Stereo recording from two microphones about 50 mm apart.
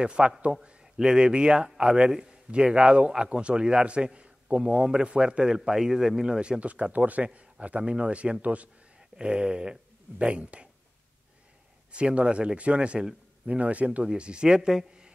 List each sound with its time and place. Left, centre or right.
0.0 s a man's voice: centre
6.6 s a man's voice: right
11.9 s a man's voice: right